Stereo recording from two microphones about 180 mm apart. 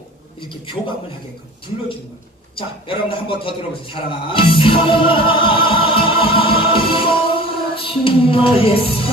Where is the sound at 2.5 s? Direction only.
30° left (ahead or behind).